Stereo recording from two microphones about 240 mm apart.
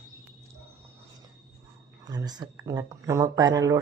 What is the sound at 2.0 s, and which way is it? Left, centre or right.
Speech, centre.